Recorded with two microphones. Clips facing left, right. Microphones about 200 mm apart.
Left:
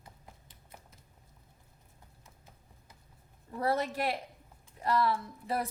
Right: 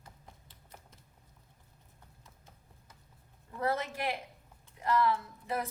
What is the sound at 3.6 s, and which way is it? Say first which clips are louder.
A woman's voice: left 2 dB; 35° left (ahead or behind).